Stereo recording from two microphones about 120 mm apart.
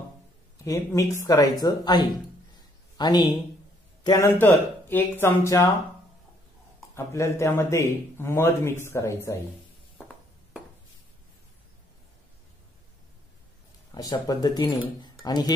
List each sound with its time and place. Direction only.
0.7 s a man's voice: 25° left (ahead or behind)
4.0 s a man's voice: 25° left (ahead or behind)
7.1 s a man's voice: 25° left (ahead or behind)
13.9 s speech: 30° left (ahead or behind)